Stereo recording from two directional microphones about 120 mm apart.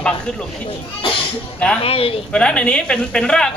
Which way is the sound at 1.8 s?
50° left (ahead or behind).